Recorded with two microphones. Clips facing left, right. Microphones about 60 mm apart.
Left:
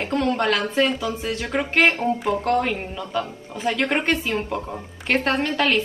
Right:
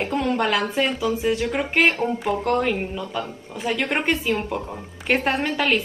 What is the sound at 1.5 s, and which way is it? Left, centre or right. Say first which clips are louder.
A woman's voice: left 5 dB; centre.